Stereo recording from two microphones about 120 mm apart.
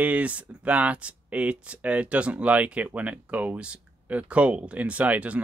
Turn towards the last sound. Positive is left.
turn(degrees=-10)  # may be behind; listen again after turning